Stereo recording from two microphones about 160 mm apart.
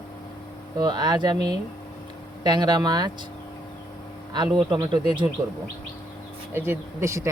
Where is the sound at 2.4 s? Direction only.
25° right (ahead or behind).